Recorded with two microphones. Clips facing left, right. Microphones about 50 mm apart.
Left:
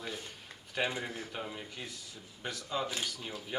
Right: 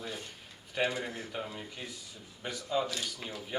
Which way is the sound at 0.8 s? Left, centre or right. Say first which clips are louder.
Right 2 dB; centre.